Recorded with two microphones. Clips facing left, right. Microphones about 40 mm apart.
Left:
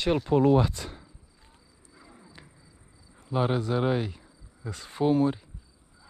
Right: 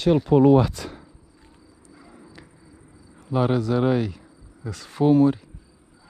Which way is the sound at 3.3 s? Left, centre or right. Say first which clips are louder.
Right 5 dB; right.